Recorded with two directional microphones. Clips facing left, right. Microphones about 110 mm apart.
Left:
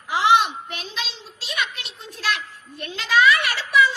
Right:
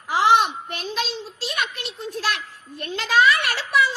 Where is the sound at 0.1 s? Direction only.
45° right (ahead or behind).